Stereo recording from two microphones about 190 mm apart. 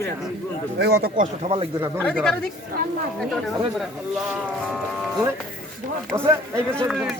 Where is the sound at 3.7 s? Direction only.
Centre (ahead or behind).